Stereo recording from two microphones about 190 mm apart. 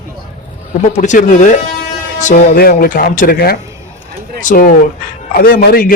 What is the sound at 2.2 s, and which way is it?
Speech, 50° left (ahead or behind).